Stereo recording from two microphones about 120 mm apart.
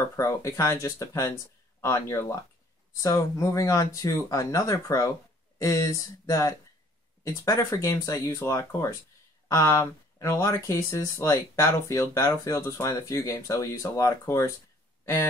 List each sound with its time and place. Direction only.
0.1 s speech: 25° left (ahead or behind)